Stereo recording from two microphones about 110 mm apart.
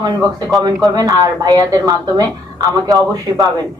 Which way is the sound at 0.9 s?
35° right (ahead or behind).